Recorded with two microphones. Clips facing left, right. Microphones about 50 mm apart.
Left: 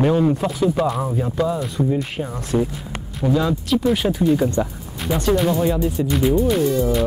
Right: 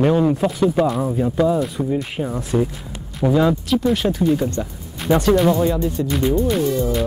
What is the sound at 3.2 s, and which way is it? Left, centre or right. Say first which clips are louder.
Speech: right 3 dB; centre.